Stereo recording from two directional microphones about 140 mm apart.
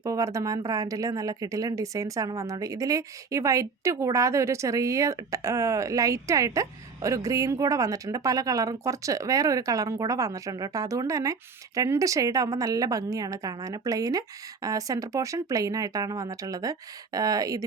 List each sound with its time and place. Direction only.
0.0 s speech: 25° right (ahead or behind)